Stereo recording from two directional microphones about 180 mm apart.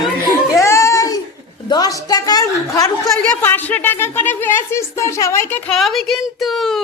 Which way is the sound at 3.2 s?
10° left (ahead or behind).